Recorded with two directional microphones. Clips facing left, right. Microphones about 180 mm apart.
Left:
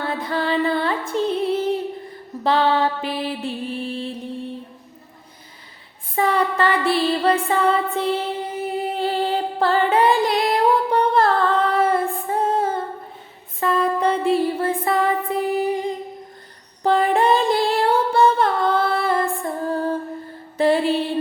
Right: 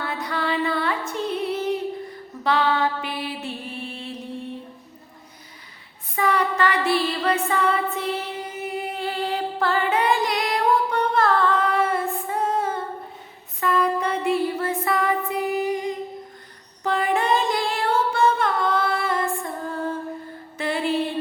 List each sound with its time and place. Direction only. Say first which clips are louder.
0.1 s music: left 4 dB; 30° left (ahead or behind)
2.4 s mantra: left 3 dB; 30° left (ahead or behind)
6.1 s music: left 2 dB; 30° left (ahead or behind)
16.8 s singing: left 5 dB; 35° left (ahead or behind)
20.6 s music: left 6 dB; 35° left (ahead or behind)